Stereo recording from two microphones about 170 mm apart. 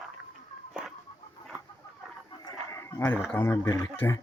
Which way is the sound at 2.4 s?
20° left (ahead or behind).